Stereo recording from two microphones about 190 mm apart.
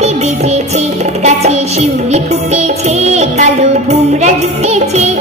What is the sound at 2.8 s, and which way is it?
Music, 35° right (ahead or behind).